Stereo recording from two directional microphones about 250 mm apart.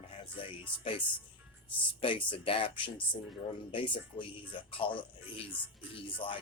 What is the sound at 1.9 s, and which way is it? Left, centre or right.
Speech, left.